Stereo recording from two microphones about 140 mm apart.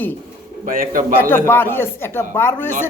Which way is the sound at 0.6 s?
75° right (ahead or behind).